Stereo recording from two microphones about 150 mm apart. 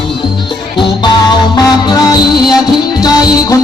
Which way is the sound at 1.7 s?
30° left (ahead or behind).